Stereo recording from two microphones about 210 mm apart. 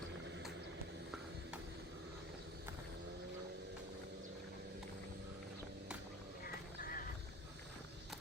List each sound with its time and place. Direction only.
6.4 s crow: 45° left (ahead or behind)